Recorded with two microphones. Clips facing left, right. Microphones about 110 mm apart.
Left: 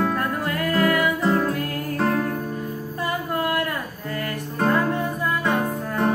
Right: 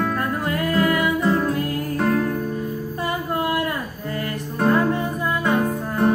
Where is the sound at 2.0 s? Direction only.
10° left (ahead or behind).